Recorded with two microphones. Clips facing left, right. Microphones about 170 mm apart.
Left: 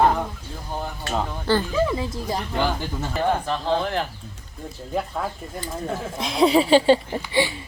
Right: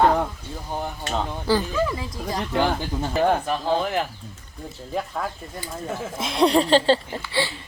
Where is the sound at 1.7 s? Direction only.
25° left (ahead or behind).